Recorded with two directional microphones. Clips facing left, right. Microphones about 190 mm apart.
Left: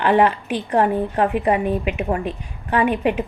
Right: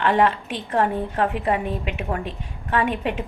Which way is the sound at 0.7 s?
15° left (ahead or behind).